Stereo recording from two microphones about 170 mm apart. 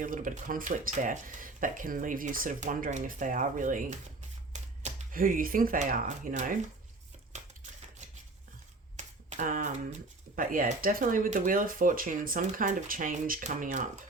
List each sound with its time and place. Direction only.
0.0 s speech: 50° right (ahead or behind)
9.0 s speech: 45° right (ahead or behind)